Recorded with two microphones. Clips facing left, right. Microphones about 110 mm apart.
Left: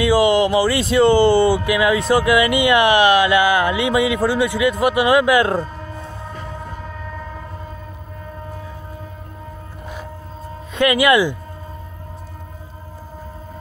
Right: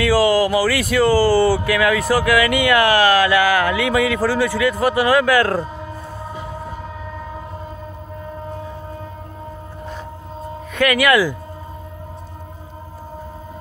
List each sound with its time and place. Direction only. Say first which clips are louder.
0.0 s speech: left 1 dB; 20° left (ahead or behind)
10.7 s speech: left 1 dB; 20° left (ahead or behind)